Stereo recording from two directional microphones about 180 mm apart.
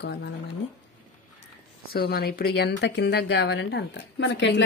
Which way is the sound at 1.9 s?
60° left (ahead or behind).